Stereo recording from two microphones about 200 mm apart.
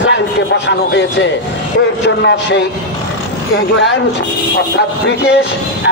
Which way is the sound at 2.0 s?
60° left (ahead or behind).